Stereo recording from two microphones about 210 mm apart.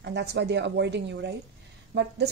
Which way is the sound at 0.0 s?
55° right (ahead or behind).